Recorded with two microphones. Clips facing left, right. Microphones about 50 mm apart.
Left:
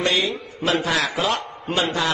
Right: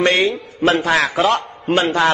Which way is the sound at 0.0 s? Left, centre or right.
Right.